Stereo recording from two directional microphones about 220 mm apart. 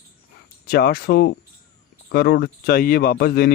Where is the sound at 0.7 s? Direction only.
45° left (ahead or behind).